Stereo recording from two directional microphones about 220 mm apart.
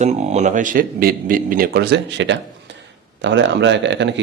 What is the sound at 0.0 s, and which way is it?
A man's voice, 30° right (ahead or behind).